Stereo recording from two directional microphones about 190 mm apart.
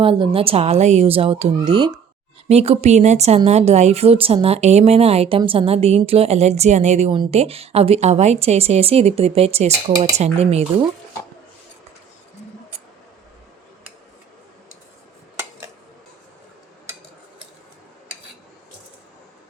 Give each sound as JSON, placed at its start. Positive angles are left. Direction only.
{"t": 0.0, "sound": "a child's voice", "side_deg": -30}
{"t": 2.5, "sound": "speech", "side_deg": -35}